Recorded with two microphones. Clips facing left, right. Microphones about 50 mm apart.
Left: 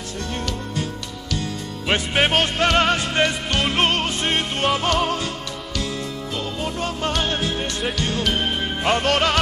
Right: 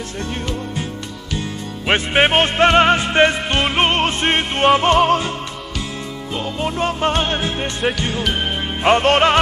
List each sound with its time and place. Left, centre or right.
1.9 s music: right
4.0 s music: right
6.3 s music: right
8.8 s music: right